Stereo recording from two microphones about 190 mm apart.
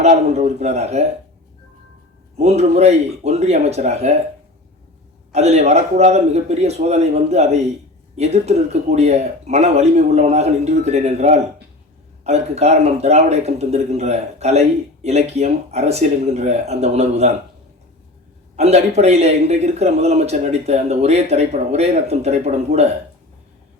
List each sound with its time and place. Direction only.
0.0 s speech: 35° right (ahead or behind)
2.4 s speech: 35° right (ahead or behind)
5.3 s speech: 35° right (ahead or behind)
18.5 s speech: 35° right (ahead or behind)